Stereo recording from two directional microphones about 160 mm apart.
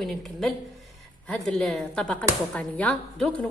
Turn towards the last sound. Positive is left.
turn(degrees=10)  # may be behind; listen again after turning